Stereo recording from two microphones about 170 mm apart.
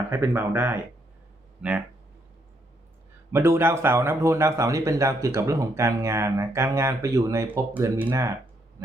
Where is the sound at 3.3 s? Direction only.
15° right (ahead or behind).